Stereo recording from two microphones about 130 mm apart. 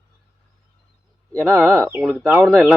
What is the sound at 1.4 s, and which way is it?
Speech, 20° right (ahead or behind).